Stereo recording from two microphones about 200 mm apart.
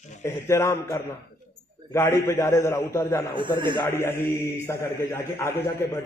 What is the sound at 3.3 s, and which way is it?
Speech, 25° right (ahead or behind).